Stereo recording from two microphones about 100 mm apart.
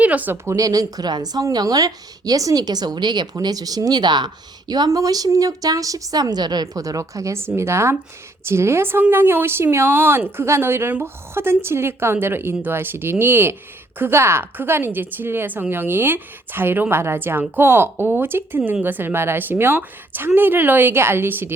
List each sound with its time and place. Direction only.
0.0 s speech: 15° right (ahead or behind)
0.4 s speech: 35° right (ahead or behind)